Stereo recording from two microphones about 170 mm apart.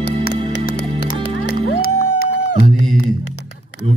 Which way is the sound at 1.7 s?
75° left (ahead or behind).